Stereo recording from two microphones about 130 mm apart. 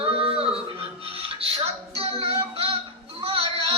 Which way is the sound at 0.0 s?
45° right (ahead or behind).